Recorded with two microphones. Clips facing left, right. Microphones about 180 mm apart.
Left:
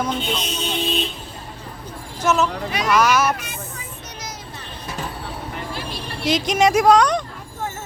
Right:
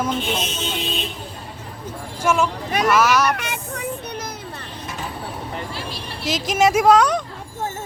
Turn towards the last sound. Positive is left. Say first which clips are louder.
# even
turn(degrees=-5)  # may be behind; listen again after turning